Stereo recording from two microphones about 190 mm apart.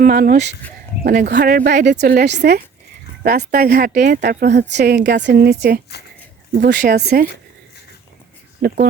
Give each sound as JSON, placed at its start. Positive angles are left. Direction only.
{"t": 0.0, "sound": "speech", "side_deg": -50}
{"t": 3.2, "sound": "speech", "side_deg": -55}
{"t": 8.6, "sound": "speech", "side_deg": -55}